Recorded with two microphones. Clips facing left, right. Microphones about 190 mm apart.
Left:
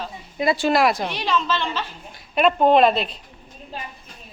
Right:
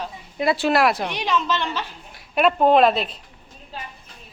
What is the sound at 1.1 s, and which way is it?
Speech, 15° right (ahead or behind).